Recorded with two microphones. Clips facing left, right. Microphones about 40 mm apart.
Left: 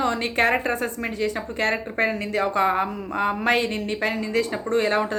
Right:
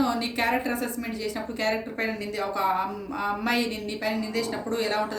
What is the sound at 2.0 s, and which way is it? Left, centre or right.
Speech, left.